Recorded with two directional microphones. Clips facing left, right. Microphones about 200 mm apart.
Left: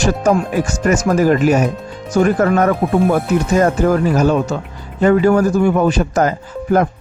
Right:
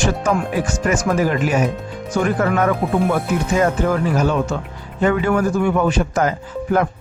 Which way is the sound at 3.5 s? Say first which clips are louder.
Left 4 dB; 40° left (ahead or behind).